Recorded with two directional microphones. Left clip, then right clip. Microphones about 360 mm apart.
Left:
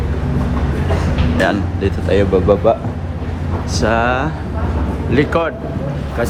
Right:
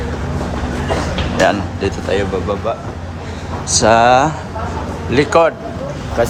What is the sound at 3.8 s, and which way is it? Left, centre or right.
Speech, centre.